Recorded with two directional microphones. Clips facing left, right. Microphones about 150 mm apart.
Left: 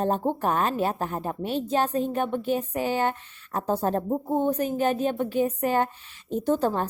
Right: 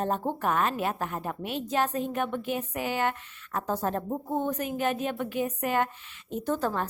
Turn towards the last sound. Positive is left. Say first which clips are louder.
# left 5 dB
turn(degrees=30)  # may be behind; listen again after turning